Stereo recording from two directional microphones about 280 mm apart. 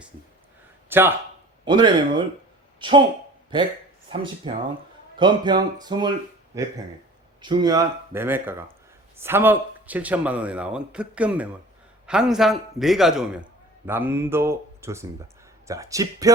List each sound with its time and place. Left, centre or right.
0.9 s a man's voice: centre